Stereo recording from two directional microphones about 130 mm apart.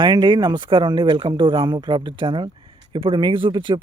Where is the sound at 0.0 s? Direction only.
35° right (ahead or behind).